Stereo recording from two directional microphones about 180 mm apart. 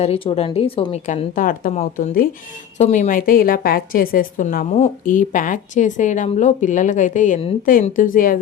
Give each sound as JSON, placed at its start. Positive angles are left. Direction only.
{"t": 0.0, "sound": "a woman's voice", "side_deg": 35}